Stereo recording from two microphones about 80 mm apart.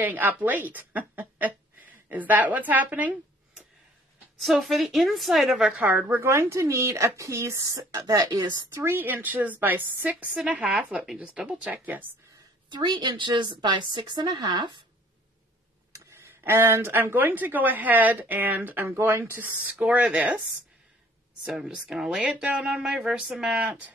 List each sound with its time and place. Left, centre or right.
0.0 s speech: right
4.4 s a woman's voice: centre
5.7 s speech: right
8.7 s speech: right
12.7 s a woman's voice: right
15.9 s speech: right; by 20.2 s centre
21.5 s speech: centre